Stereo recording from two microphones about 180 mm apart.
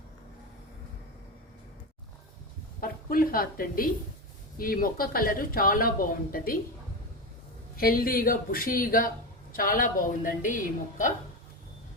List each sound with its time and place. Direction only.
2.8 s a woman's voice: 50° left (ahead or behind)
7.8 s speech: 55° left (ahead or behind)